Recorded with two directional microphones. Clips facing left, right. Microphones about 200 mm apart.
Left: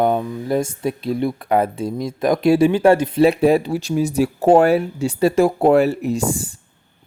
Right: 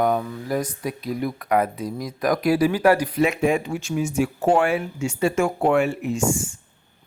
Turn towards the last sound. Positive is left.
turn(degrees=35)  # may be behind; listen again after turning